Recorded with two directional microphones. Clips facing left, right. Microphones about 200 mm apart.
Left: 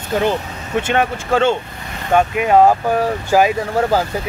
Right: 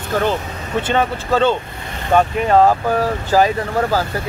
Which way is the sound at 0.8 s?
10° left (ahead or behind).